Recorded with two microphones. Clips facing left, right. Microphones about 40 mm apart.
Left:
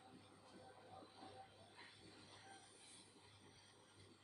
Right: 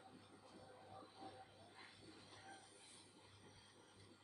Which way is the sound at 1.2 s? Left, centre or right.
Left.